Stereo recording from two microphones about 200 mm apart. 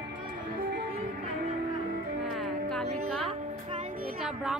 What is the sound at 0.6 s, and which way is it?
Music, 45° right (ahead or behind).